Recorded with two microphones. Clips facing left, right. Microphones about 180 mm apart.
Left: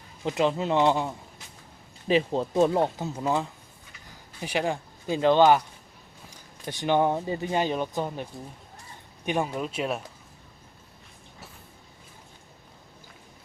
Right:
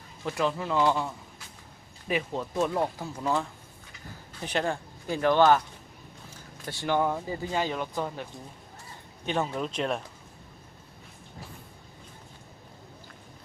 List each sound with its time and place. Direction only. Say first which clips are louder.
0.3 s speech: left 4 dB; 20° left (ahead or behind)
4.4 s speech: left 2 dB; 10° left (ahead or behind)